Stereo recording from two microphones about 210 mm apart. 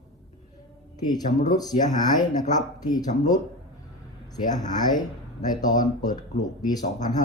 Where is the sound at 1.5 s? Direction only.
20° left (ahead or behind).